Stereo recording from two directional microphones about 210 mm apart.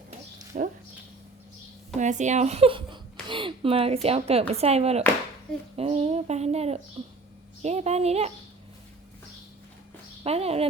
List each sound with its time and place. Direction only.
0.5 s a woman's voice: 35° right (ahead or behind)
2.0 s a woman's voice: 35° right (ahead or behind)
10.2 s speech: 30° right (ahead or behind)